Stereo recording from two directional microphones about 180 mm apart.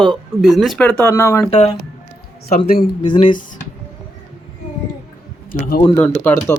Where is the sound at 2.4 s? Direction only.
55° left (ahead or behind).